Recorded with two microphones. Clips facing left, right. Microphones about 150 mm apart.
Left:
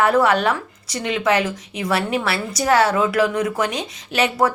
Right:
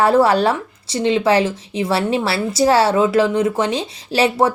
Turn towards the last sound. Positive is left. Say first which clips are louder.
# right 3 dB
turn(degrees=-30)  # may be behind; listen again after turning